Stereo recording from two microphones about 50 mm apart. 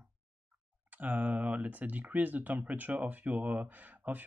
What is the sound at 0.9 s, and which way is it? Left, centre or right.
Speech, right.